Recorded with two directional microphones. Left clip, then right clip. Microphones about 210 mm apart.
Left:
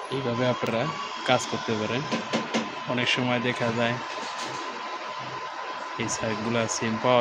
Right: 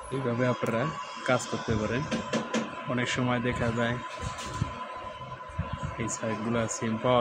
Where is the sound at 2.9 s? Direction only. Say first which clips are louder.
Left 4 dB; 20° right (ahead or behind).